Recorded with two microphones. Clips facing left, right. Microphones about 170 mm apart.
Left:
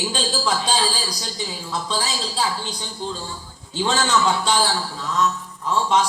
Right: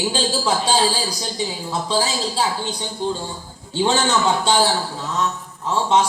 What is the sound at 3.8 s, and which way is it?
Speech, 30° right (ahead or behind).